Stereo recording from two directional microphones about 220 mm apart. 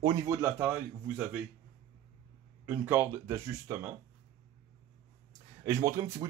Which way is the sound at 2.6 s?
10° right (ahead or behind).